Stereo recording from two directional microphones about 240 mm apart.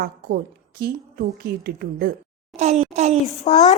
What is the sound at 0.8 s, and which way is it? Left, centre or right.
A woman's voice, right.